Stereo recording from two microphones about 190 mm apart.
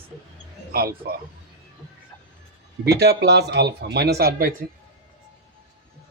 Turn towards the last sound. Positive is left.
turn(degrees=-50)  # may be behind; listen again after turning